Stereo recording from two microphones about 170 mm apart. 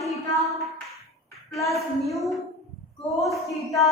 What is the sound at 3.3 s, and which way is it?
Speech, 20° left (ahead or behind).